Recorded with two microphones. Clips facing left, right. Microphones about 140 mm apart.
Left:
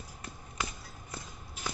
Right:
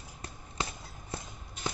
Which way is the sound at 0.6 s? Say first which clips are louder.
Right 2 dB; 30° right (ahead or behind).